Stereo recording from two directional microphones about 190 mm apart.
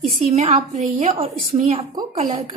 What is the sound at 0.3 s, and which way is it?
A woman's voice, 35° right (ahead or behind).